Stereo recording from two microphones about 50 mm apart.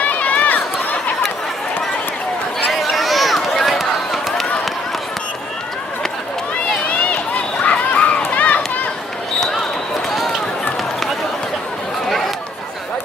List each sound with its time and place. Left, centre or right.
0.0 s run: left
2.7 s run: centre
6.9 s run: left
8.2 s children playing: left